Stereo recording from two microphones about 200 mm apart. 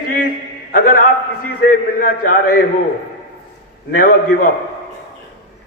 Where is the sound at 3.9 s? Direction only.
45° left (ahead or behind).